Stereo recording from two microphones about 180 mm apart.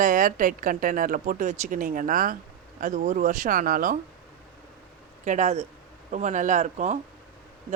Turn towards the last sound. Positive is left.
turn(degrees=-40)  # may be behind; listen again after turning